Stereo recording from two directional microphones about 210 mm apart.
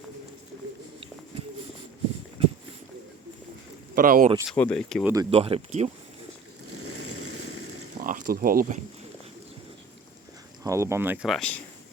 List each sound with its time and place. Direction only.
3.9 s speech: 40° right (ahead or behind)
4.4 s speech: 5° left (ahead or behind)
5.0 s speech: 15° right (ahead or behind)
5.3 s speech: 30° right (ahead or behind)
6.7 s vehicle: 90° right
8.0 s speech: 40° right (ahead or behind)
10.6 s speech: 15° right (ahead or behind); by 11.6 s 5° left (ahead or behind)